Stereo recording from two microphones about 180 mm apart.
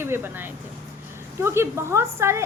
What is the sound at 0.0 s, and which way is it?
A woman's voice, 10° right (ahead or behind).